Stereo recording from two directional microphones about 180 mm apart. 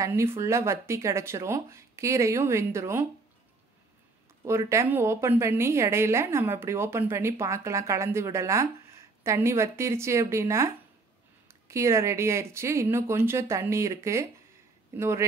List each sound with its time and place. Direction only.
0.0 s a woman's voice: 15° right (ahead or behind)
4.5 s a woman's voice: 15° right (ahead or behind)